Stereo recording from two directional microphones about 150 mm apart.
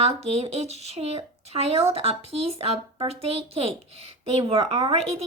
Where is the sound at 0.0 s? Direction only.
45° right (ahead or behind).